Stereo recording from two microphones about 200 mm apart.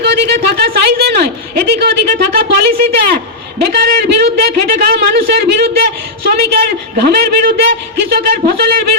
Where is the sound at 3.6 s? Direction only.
50° right (ahead or behind).